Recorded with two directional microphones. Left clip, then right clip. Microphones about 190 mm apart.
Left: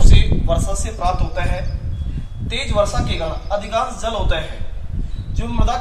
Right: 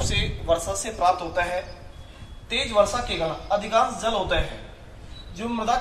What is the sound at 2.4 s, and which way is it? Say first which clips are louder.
A man's voice: left 2 dB; 10° right (ahead or behind).